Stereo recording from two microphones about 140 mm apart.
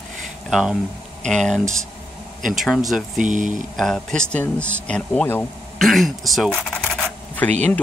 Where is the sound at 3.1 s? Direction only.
65° right (ahead or behind).